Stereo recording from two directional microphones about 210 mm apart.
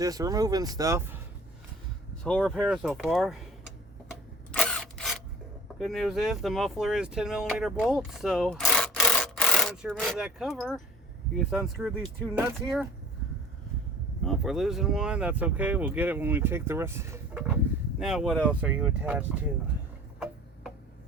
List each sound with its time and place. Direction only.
0.0 s speech: 15° right (ahead or behind)
2.2 s speech: 5° left (ahead or behind)
4.1 s a sound: 5° left (ahead or behind)
5.8 s speech: centre (ahead or behind)
11.8 s speech: 5° right (ahead or behind)
14.3 s speech: centre (ahead or behind)